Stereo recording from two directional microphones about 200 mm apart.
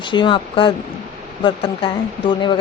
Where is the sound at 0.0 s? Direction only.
25° left (ahead or behind).